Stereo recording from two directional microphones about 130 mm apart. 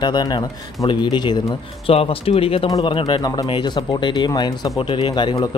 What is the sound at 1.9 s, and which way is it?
Speech, 45° left (ahead or behind).